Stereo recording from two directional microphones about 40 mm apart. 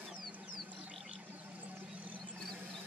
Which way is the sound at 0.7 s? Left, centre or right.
Right.